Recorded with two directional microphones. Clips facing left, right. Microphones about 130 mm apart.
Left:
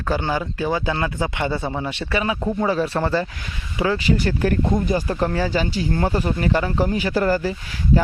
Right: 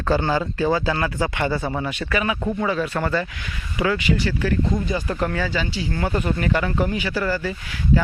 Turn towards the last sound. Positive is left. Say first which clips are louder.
# left 4 dB
turn(degrees=45)  # may be behind; listen again after turning